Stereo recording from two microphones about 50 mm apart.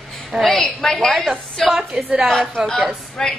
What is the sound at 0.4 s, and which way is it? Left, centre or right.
Speech, centre.